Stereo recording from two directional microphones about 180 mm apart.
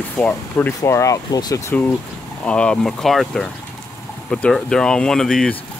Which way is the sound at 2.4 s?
5° left (ahead or behind).